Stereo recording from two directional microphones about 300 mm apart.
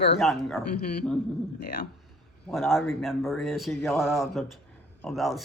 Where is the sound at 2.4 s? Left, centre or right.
Centre.